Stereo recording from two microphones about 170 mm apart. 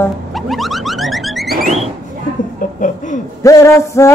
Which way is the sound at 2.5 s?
50° left (ahead or behind).